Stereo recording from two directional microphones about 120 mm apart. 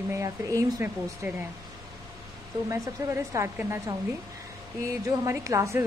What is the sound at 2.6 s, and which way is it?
Speech, 25° right (ahead or behind).